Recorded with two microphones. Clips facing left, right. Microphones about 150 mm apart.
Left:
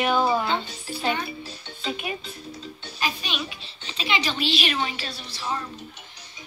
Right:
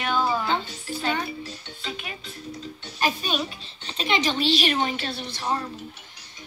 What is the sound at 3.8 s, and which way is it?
A woman's voice, 50° right (ahead or behind).